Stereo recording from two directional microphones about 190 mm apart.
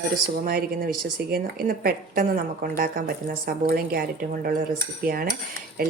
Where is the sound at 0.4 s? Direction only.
50° right (ahead or behind).